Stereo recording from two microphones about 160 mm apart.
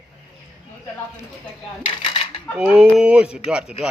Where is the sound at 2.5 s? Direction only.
10° right (ahead or behind).